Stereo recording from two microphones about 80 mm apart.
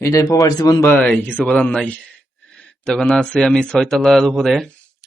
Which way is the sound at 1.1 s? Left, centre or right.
Centre.